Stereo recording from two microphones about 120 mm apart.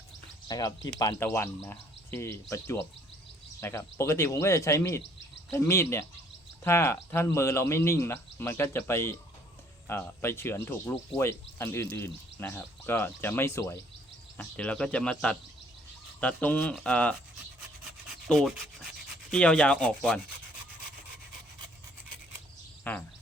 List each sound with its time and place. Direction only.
0.4 s speech: 30° left (ahead or behind)
1.2 s speech: 20° left (ahead or behind)
14.3 s speech: 10° left (ahead or behind)
18.3 s rub: centre (ahead or behind)
19.3 s speech: 10° left (ahead or behind)
22.8 s speech: 15° left (ahead or behind)